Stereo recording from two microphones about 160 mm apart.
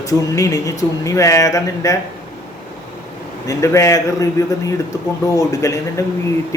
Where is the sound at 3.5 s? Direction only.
20° left (ahead or behind).